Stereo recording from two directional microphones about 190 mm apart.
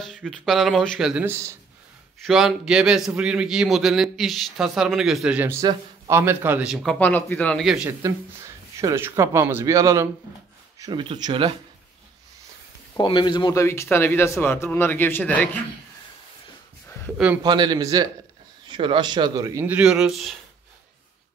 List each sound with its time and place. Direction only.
0.0 s a man's voice: centre (ahead or behind)
2.1 s a man's voice: centre (ahead or behind)
8.0 s speech: 15° right (ahead or behind)
12.9 s speech: 20° left (ahead or behind)
17.4 s speech: 25° right (ahead or behind); by 20.3 s centre (ahead or behind)